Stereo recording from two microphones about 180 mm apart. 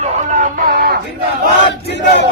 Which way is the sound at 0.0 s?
45° right (ahead or behind).